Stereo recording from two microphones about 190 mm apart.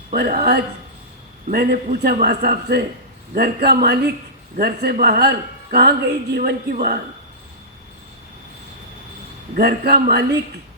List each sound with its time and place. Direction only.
0.1 s a man's voice: 55° right (ahead or behind)
9.6 s a man's voice: 55° right (ahead or behind)